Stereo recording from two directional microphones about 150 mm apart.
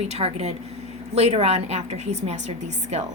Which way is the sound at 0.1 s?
45° right (ahead or behind).